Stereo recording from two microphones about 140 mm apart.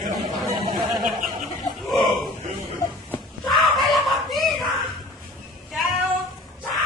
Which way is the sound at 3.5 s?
Centre (ahead or behind).